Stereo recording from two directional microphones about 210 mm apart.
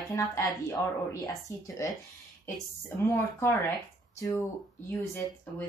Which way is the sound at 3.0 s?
10° left (ahead or behind).